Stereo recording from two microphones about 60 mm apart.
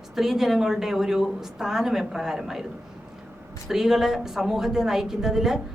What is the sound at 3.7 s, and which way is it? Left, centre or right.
Speech, centre.